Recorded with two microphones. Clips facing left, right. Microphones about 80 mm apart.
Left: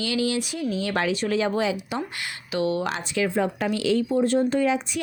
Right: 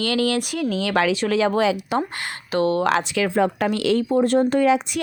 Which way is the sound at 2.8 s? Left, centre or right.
Right.